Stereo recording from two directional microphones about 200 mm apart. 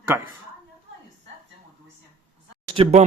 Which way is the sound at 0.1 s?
10° right (ahead or behind).